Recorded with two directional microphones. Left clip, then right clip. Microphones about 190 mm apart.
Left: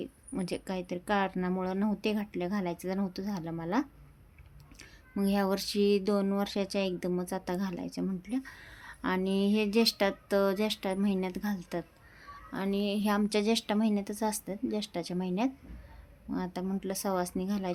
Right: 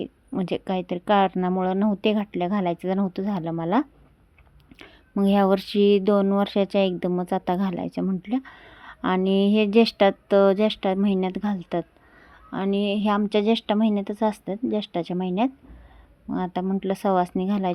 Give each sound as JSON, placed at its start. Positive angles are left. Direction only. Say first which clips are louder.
{"t": 0.0, "sound": "speech", "louder": "right 8 dB", "side_deg": -30}